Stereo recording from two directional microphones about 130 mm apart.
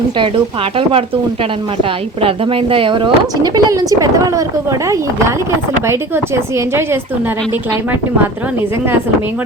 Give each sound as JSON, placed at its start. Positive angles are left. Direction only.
{"t": 0.2, "sound": "speech", "side_deg": -40}